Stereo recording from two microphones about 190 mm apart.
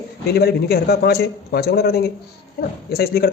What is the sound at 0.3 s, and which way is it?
A man's voice, 55° left (ahead or behind).